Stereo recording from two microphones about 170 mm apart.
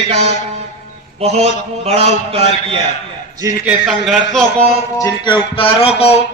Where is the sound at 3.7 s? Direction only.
5° right (ahead or behind).